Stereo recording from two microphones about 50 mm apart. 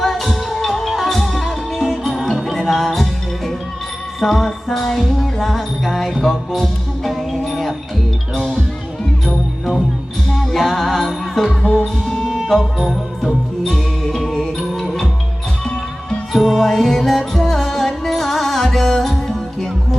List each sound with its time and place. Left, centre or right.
0.0 s music: centre
9.2 s music: centre
11.6 s music: left
12.0 s music: centre